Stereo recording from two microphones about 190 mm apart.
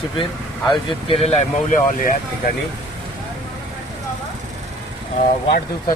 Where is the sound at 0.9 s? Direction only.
30° left (ahead or behind).